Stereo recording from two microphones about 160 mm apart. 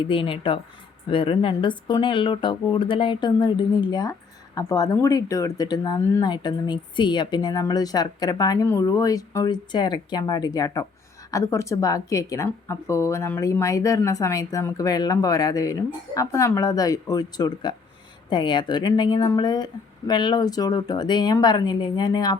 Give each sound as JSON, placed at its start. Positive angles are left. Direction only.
{"t": 0.0, "sound": "a woman's voice", "side_deg": 35}